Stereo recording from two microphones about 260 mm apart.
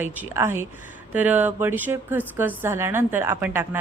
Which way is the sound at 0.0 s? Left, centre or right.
Centre.